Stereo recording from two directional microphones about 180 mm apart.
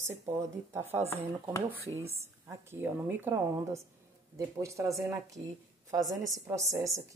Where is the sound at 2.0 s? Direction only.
15° right (ahead or behind).